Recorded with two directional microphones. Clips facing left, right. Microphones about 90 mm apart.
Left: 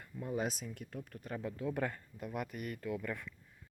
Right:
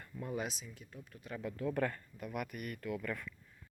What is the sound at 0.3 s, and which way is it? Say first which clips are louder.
Speech: left 5 dB; 45° left (ahead or behind).